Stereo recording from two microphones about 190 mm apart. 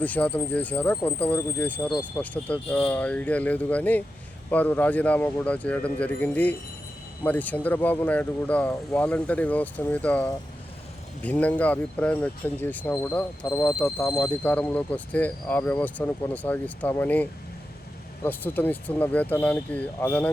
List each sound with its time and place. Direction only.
0.0 s speech: 5° left (ahead or behind)